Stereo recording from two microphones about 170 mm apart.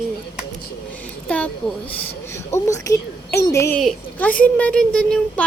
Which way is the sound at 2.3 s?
15° left (ahead or behind).